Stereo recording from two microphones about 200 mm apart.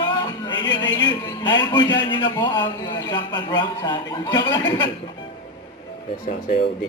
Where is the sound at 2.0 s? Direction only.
20° left (ahead or behind).